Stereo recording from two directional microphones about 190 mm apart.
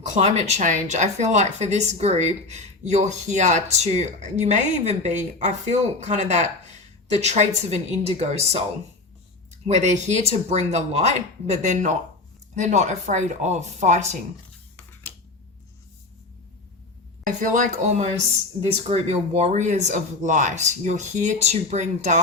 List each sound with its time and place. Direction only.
0.1 s speech: 35° right (ahead or behind)
17.2 s speech: 45° right (ahead or behind)